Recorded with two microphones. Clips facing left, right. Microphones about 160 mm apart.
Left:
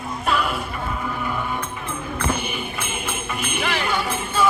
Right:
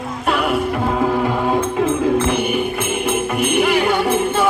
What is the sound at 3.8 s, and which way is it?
Music, 60° right (ahead or behind).